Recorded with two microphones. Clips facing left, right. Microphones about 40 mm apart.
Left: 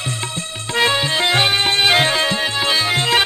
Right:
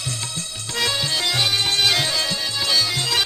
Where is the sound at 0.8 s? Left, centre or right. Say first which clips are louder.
Left 6 dB; left.